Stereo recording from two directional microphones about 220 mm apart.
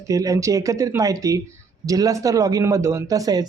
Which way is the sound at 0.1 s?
15° right (ahead or behind).